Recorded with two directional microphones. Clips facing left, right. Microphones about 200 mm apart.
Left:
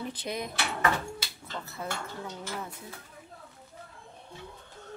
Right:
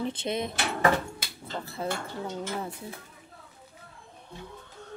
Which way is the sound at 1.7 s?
30° right (ahead or behind).